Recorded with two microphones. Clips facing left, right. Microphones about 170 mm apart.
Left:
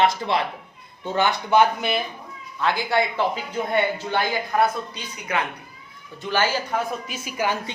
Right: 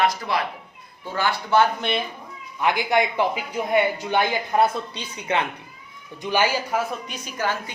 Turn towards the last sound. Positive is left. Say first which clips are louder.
# left 1 dB
turn(degrees=10)  # may be behind; listen again after turning